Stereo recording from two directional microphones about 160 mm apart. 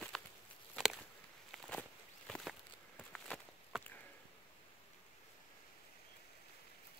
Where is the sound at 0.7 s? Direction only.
Centre (ahead or behind).